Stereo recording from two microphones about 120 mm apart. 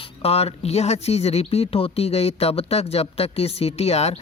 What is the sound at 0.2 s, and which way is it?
Speech, 55° left (ahead or behind).